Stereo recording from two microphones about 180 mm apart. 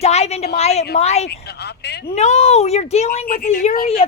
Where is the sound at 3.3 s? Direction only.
50° left (ahead or behind).